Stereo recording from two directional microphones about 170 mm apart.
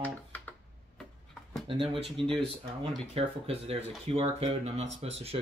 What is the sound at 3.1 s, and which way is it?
Speech, 35° right (ahead or behind).